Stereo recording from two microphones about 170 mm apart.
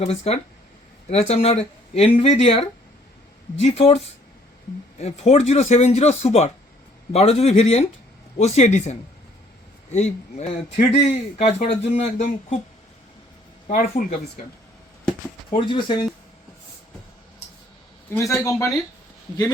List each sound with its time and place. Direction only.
0.0 s speech: 40° left (ahead or behind)
13.7 s speech: 55° left (ahead or behind)
15.4 s speech: 25° left (ahead or behind)
18.1 s speech: 15° left (ahead or behind)